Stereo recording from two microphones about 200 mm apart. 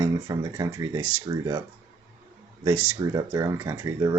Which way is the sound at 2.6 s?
10° right (ahead or behind).